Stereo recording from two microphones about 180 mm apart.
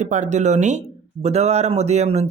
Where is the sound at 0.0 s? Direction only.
40° right (ahead or behind).